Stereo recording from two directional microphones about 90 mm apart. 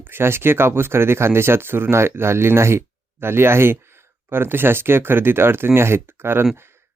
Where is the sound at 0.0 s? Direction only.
25° right (ahead or behind).